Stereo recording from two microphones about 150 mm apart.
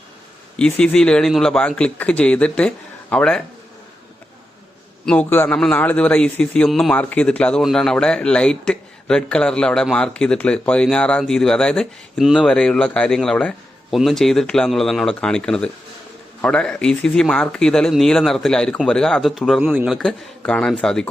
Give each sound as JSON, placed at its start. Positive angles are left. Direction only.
{"t": 0.6, "sound": "a man's voice", "side_deg": 5}
{"t": 5.0, "sound": "a man's voice", "side_deg": 10}
{"t": 20.0, "sound": "a man's voice", "side_deg": 5}